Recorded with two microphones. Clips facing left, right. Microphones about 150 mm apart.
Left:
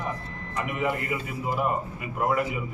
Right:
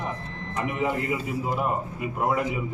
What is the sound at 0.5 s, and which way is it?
Speech, 25° right (ahead or behind).